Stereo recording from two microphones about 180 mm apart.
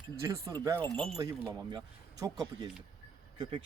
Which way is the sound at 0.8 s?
5° left (ahead or behind).